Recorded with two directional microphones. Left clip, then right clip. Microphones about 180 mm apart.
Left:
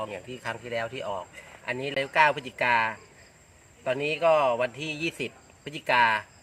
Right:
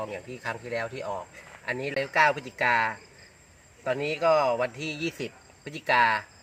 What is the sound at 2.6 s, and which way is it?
Cricket, 5° right (ahead or behind).